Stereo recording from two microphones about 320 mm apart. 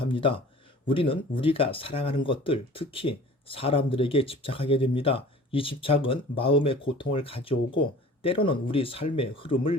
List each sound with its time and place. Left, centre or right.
0.0 s speech: centre